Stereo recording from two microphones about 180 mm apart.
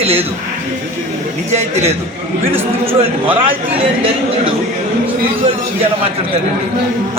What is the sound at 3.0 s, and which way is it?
Speech, 30° right (ahead or behind).